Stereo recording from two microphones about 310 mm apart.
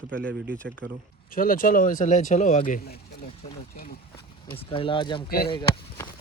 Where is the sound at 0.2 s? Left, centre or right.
Right.